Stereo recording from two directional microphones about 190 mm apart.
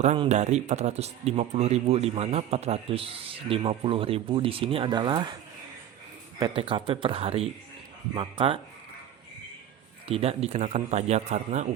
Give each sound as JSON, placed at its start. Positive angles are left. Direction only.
{"t": 0.0, "sound": "speech", "side_deg": -35}
{"t": 6.4, "sound": "speech", "side_deg": -25}
{"t": 10.1, "sound": "speech", "side_deg": -30}